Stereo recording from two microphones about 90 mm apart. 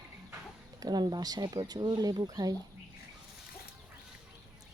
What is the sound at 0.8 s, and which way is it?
Speech, 50° right (ahead or behind).